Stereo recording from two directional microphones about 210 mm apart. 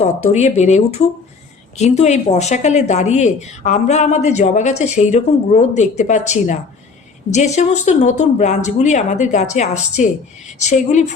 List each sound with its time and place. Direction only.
0.0 s speech: 30° left (ahead or behind)